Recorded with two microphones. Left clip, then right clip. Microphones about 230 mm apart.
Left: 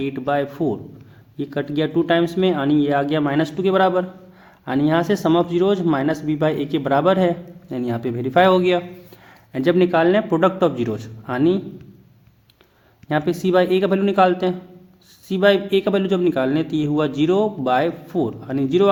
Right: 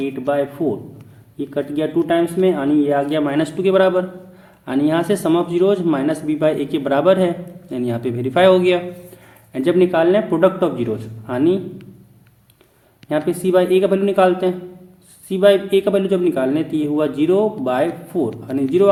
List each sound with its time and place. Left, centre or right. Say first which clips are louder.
0.0 s a man's voice: right 2 dB; left
13.1 s a man's voice: right 2 dB; left